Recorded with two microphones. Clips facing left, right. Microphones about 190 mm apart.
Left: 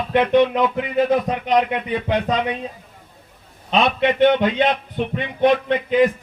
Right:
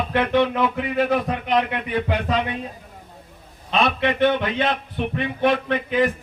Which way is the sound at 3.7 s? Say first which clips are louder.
Left 3 dB; 20° left (ahead or behind).